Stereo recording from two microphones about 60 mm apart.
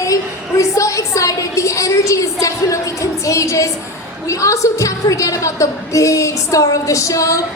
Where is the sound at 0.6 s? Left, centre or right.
Left.